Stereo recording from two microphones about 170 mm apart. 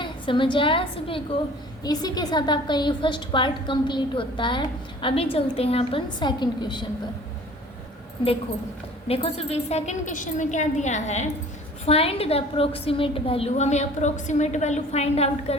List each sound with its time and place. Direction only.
0.0 s a woman's voice: 30° left (ahead or behind)
9.0 s a woman's voice: 35° left (ahead or behind)